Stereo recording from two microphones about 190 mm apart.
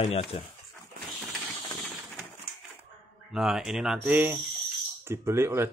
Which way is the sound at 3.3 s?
Centre (ahead or behind).